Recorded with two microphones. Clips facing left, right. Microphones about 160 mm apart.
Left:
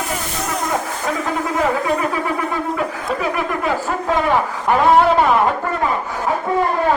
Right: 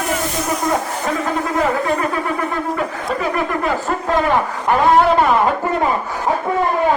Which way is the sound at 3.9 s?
5° left (ahead or behind).